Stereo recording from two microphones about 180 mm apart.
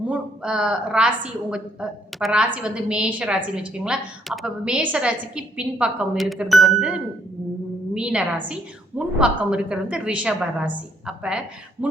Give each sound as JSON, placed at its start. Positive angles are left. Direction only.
{"t": 0.1, "sound": "a woman's voice", "side_deg": -5}